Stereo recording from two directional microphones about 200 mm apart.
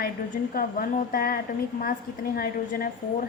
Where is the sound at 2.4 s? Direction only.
45° left (ahead or behind).